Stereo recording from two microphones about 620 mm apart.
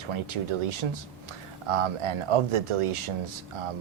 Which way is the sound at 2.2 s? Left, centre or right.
Right.